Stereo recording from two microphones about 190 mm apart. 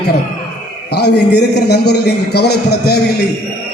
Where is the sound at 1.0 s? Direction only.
60° left (ahead or behind).